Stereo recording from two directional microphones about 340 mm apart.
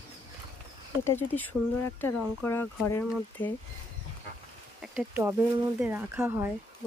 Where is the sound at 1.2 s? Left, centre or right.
Centre.